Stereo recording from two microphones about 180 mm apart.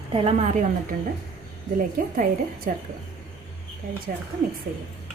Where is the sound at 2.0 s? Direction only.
50° right (ahead or behind).